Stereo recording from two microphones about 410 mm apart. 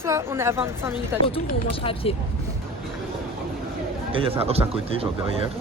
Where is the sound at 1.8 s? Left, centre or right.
Centre.